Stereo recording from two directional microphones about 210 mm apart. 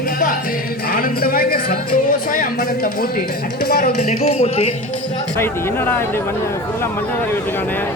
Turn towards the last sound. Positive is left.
turn(degrees=10)  # may be behind; listen again after turning